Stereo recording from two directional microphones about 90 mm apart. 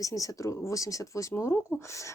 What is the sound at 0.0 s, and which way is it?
Speech, 40° left (ahead or behind).